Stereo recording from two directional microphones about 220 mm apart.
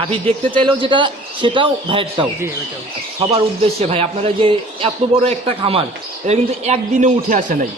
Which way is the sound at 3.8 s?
25° right (ahead or behind).